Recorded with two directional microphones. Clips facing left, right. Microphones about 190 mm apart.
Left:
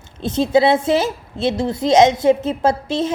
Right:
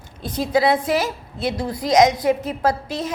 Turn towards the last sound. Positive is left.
turn(degrees=25)  # may be behind; listen again after turning